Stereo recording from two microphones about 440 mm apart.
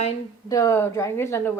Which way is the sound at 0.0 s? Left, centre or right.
Centre.